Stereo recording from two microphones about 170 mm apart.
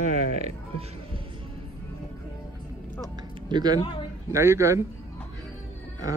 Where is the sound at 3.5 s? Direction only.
25° right (ahead or behind).